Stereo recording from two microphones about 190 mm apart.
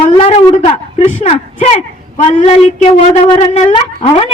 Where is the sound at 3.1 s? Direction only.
35° left (ahead or behind).